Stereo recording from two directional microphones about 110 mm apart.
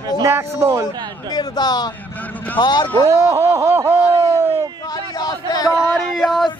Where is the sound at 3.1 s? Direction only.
25° right (ahead or behind).